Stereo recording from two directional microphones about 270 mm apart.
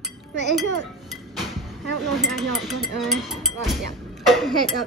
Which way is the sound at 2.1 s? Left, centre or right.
Centre.